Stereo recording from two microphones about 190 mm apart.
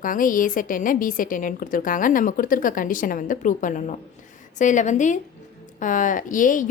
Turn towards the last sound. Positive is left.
turn(degrees=45)  # may be behind; listen again after turning